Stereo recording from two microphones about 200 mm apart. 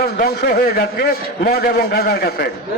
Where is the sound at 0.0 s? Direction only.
50° left (ahead or behind).